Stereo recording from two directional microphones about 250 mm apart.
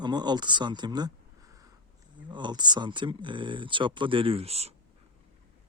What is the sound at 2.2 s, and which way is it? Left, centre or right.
Speech, centre.